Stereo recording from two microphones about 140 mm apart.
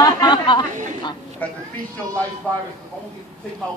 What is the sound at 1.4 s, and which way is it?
Speech, 10° left (ahead or behind).